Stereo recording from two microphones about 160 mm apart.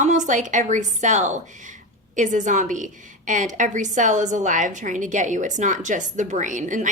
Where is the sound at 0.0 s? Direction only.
50° right (ahead or behind).